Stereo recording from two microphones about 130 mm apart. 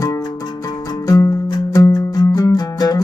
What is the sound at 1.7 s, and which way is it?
Music, 30° left (ahead or behind).